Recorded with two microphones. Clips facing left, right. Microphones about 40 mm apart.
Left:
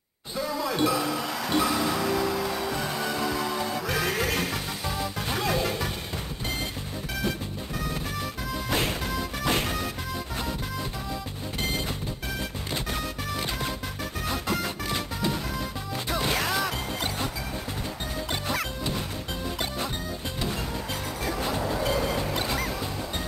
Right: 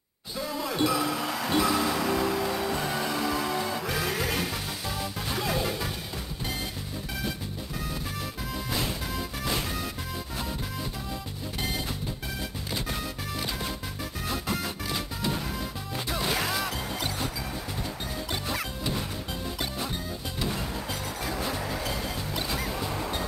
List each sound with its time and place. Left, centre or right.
0.7 s music: centre
3.9 s music: centre
8.6 s music: left
14.3 s music: centre
18.5 s music: centre
22.1 s music: centre
22.6 s music: centre